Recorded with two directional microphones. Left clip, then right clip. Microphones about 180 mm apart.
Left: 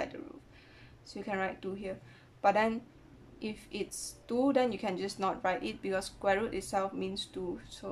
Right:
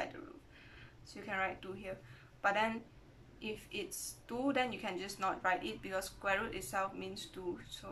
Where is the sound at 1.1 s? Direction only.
25° left (ahead or behind).